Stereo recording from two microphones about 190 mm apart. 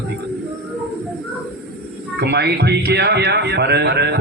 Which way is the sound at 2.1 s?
60° right (ahead or behind).